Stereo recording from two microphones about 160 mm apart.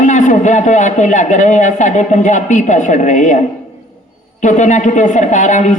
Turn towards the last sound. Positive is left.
turn(degrees=50)  # may be behind; listen again after turning